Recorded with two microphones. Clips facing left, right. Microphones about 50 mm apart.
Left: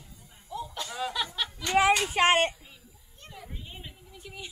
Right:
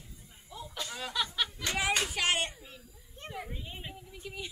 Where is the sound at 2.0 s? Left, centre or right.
Left.